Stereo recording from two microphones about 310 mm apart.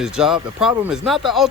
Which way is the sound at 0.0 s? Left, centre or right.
Centre.